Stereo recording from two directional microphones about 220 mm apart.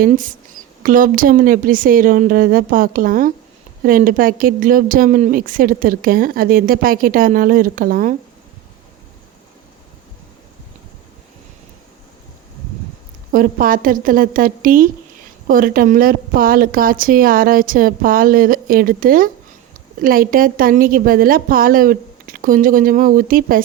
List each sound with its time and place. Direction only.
0.0 s a woman's voice: 35° right (ahead or behind)
13.3 s a woman's voice: 40° right (ahead or behind)